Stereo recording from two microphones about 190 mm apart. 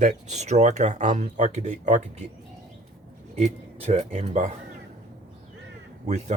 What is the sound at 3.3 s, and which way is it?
Speech, 35° right (ahead or behind).